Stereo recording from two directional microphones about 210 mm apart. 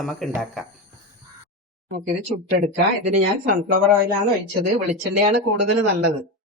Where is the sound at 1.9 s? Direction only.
45° right (ahead or behind).